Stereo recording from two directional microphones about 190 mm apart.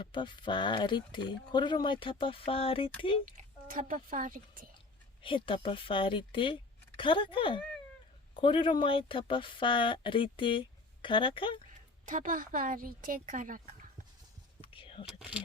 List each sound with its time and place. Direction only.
0.0 s a woman's voice: 25° left (ahead or behind)
3.3 s speech: 45° right (ahead or behind)
5.2 s a woman's voice: 25° left (ahead or behind)
12.0 s speech: 45° right (ahead or behind)
14.6 s whispering: 30° left (ahead or behind)